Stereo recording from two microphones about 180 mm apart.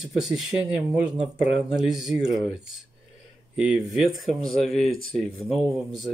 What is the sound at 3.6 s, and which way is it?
Speech, centre (ahead or behind).